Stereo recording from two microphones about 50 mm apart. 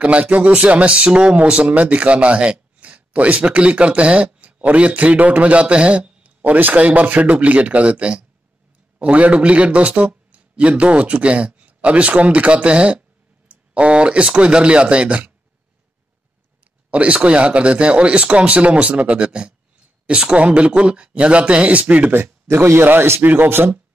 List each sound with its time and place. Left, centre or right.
0.0 s a man's voice: right
16.9 s a man's voice: right
22.1 s speech: right
23.2 s speech: right